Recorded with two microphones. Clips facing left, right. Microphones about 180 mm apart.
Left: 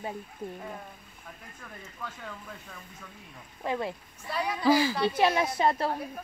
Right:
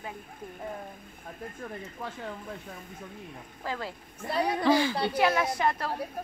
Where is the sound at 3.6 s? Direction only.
20° left (ahead or behind).